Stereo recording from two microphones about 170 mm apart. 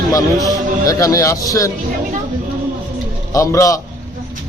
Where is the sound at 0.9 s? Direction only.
20° left (ahead or behind).